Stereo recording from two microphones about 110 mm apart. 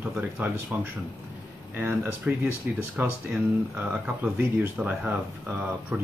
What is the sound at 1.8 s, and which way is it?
Speech, 20° right (ahead or behind).